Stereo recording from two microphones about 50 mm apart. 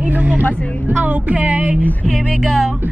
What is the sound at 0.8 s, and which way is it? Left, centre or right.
Speech, right.